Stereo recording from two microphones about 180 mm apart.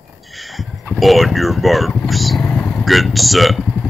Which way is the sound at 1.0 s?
Centre (ahead or behind).